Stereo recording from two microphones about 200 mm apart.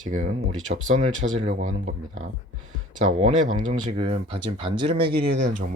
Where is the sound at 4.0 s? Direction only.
30° right (ahead or behind).